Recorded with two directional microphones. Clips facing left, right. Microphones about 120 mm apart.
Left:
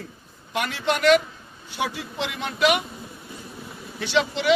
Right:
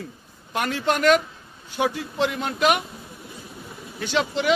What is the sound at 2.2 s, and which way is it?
Speech, 45° right (ahead or behind).